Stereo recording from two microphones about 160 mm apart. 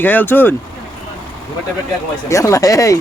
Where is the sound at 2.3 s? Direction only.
20° left (ahead or behind).